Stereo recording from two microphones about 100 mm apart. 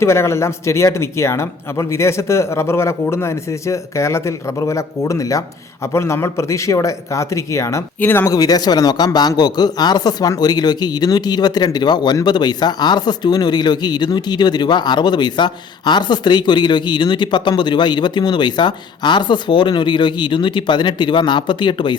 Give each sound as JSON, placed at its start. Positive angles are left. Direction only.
{"t": 0.0, "sound": "speech", "side_deg": 25}
{"t": 8.3, "sound": "a man's voice", "side_deg": 40}